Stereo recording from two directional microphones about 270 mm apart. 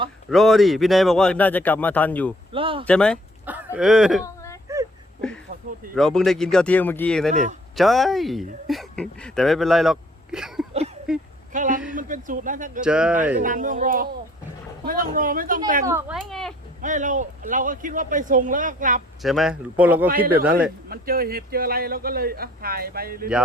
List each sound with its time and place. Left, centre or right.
0.3 s speech: centre
2.5 s a man's voice: centre
2.8 s speech: centre
4.2 s a sound: centre
5.5 s a sound: right
5.9 s speech: centre
11.1 s a sound: centre
11.5 s a man's voice: right
12.8 s speech: centre
13.4 s a man's voice: right
15.9 s speech: centre
16.8 s a man's voice: right
19.2 s speech: centre
20.9 s speech: right